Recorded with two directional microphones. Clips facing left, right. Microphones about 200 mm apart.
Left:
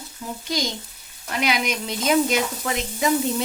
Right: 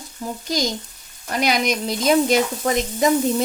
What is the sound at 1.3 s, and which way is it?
Speech, 40° right (ahead or behind).